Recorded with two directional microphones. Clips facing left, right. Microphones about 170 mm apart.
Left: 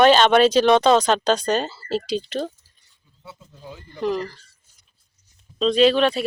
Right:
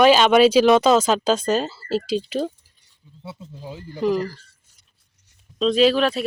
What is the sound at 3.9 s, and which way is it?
Speech, 5° right (ahead or behind).